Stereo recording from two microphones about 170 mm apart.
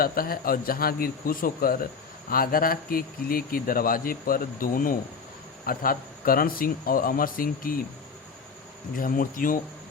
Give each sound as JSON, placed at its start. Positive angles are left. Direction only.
{"t": 0.0, "sound": "a man's voice", "side_deg": 60}
{"t": 9.0, "sound": "speech", "side_deg": 55}